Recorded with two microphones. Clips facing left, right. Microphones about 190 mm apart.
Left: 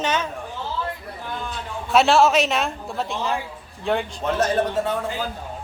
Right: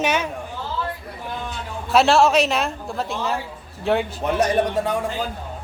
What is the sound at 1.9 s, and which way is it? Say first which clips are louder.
Speech: right 1 dB; centre (ahead or behind).